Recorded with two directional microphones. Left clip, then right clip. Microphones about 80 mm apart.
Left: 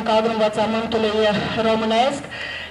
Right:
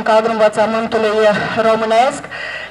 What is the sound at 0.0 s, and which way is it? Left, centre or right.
A man's voice, right.